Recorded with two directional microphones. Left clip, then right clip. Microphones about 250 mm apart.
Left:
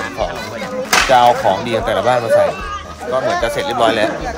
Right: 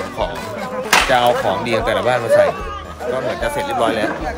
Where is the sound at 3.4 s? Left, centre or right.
Left.